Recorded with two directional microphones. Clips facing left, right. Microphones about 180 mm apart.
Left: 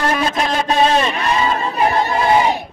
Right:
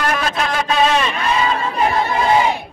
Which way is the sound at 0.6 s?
35° left (ahead or behind).